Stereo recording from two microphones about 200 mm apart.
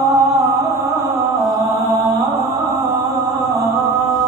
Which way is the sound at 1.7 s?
15° right (ahead or behind).